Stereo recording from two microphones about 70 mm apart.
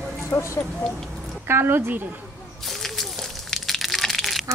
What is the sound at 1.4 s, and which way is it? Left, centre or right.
Speech, right.